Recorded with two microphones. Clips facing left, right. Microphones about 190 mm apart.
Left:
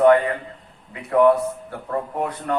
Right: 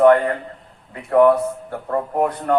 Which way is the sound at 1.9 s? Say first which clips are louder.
Right 5 dB; 45° right (ahead or behind).